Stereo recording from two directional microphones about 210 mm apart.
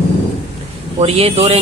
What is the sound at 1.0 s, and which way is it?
Speech, 30° right (ahead or behind).